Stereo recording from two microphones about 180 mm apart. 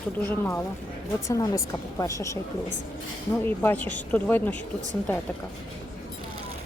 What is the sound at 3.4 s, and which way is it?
A woman's voice, 10° left (ahead or behind).